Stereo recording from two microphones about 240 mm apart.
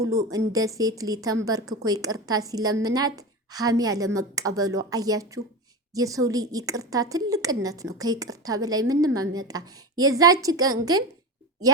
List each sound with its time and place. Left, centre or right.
0.0 s a woman's voice: centre